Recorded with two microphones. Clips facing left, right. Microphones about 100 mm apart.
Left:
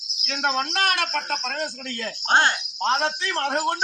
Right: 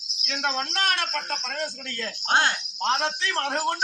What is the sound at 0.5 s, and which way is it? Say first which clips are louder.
Speech: left 4 dB; 60° left (ahead or behind).